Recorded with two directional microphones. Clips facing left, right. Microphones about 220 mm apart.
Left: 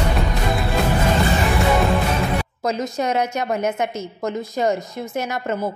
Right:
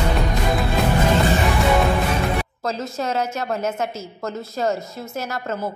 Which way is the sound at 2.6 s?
15° left (ahead or behind).